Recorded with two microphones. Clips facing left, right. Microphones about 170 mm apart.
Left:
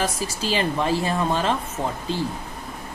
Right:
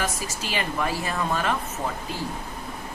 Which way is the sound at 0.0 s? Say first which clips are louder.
Left 4 dB; 35° left (ahead or behind).